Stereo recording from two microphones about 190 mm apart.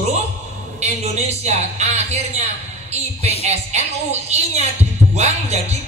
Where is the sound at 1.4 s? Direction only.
35° right (ahead or behind).